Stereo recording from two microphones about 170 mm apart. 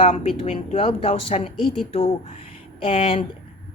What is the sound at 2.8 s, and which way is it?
Speech, 30° left (ahead or behind).